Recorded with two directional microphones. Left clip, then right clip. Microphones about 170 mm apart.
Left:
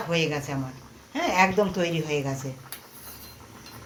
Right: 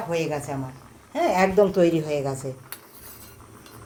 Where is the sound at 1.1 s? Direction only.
80° right.